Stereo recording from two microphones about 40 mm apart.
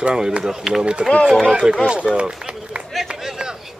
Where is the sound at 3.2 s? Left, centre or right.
Centre.